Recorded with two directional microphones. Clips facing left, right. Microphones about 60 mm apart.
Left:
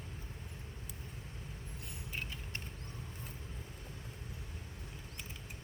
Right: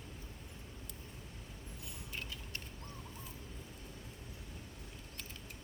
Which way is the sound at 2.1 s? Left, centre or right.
Left.